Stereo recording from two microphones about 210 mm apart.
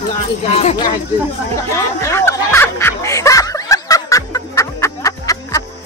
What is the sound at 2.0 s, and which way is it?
Snicker, 10° left (ahead or behind).